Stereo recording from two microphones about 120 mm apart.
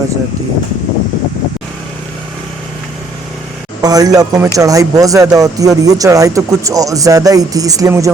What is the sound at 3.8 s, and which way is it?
Speech, 30° right (ahead or behind).